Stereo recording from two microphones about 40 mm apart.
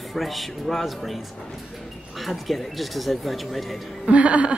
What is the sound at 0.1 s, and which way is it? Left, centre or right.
Speech, centre.